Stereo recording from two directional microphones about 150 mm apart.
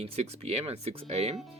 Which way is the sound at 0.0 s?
45° right (ahead or behind).